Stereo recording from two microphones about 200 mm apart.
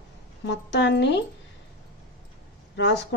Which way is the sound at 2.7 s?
60° left (ahead or behind).